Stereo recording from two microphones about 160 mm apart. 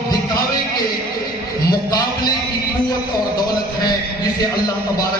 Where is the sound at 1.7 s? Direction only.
25° left (ahead or behind).